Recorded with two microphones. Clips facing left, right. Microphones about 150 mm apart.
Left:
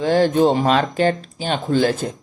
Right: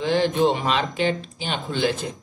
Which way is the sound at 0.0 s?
40° left (ahead or behind).